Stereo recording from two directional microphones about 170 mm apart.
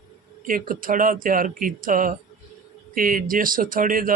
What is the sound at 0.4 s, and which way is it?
Speech, 55° right (ahead or behind).